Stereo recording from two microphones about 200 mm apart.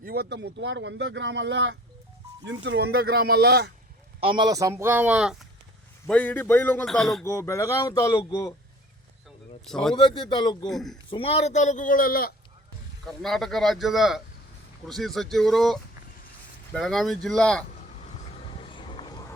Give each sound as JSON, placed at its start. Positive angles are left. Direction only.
{"t": 0.0, "sound": "speech", "side_deg": -50}
{"t": 4.2, "sound": "a man's voice", "side_deg": -25}
{"t": 6.1, "sound": "speech", "side_deg": 10}
{"t": 7.3, "sound": "speech", "side_deg": 15}
{"t": 9.6, "sound": "speech", "side_deg": 0}
{"t": 9.9, "sound": "speech", "side_deg": 25}
{"t": 10.7, "sound": "speech", "side_deg": 0}
{"t": 11.1, "sound": "speech", "side_deg": 30}
{"t": 13.1, "sound": "speech", "side_deg": 0}
{"t": 18.0, "sound": "vehicle", "side_deg": 35}